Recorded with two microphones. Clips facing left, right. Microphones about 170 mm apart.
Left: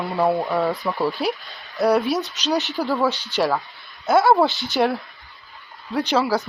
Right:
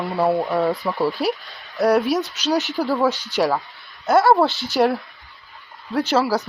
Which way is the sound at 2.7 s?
15° right (ahead or behind).